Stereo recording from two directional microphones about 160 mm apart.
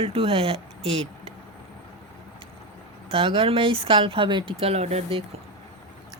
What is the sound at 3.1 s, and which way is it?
Speech, 35° right (ahead or behind).